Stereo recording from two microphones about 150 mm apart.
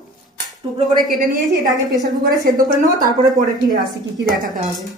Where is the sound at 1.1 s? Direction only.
70° right (ahead or behind).